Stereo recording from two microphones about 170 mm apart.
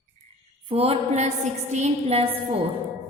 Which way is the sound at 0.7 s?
35° right (ahead or behind).